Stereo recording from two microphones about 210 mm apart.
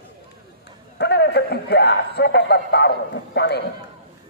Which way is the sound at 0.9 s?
50° left (ahead or behind).